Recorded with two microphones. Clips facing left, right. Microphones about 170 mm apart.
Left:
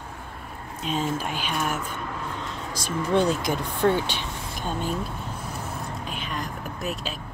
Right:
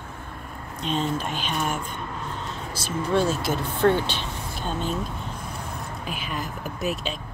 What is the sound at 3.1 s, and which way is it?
Speech, 15° left (ahead or behind).